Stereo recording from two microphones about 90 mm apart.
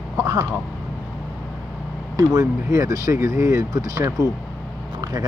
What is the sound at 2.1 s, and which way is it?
Speech, 35° right (ahead or behind).